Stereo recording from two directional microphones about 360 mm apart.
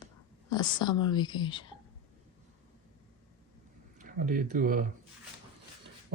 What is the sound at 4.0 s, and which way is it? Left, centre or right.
Speech, right.